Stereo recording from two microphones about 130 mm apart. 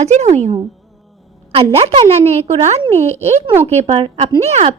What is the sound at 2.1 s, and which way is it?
A woman's voice, 55° right (ahead or behind).